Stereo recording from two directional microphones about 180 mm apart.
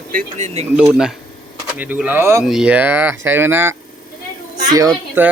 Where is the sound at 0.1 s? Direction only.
45° right (ahead or behind).